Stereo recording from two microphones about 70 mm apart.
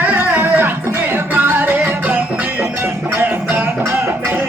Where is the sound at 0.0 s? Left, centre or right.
Right.